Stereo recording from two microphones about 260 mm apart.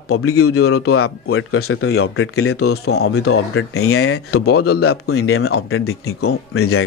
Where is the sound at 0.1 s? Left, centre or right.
Left.